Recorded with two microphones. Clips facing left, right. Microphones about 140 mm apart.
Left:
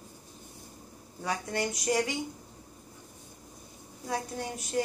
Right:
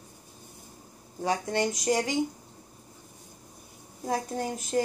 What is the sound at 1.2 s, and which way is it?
Speech, 35° right (ahead or behind).